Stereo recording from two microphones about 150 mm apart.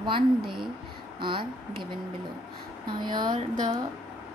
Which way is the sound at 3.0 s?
30° right (ahead or behind).